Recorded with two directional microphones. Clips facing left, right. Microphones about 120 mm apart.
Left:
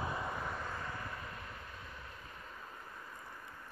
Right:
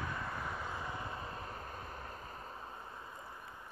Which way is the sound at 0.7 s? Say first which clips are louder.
Right 1 dB; 15° right (ahead or behind).